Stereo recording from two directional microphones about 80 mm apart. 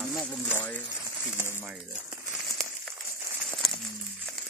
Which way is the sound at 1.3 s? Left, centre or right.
Left.